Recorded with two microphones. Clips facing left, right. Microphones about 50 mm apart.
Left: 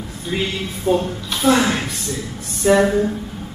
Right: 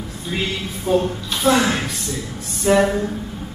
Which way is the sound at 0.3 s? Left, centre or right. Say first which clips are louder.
Left 2 dB; centre.